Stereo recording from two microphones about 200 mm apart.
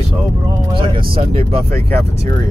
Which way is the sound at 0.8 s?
25° right (ahead or behind).